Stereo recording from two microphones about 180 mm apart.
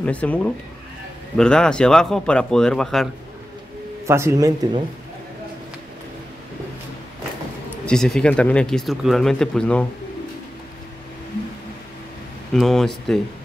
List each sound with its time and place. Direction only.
0.0 s speech: 10° left (ahead or behind)
4.1 s speech: 15° right (ahead or behind)
7.8 s speech: 5° left (ahead or behind)
12.5 s speech: centre (ahead or behind)